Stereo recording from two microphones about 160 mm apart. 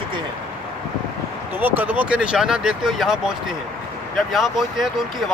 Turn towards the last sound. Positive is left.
turn(degrees=0)  # may be behind; listen again after turning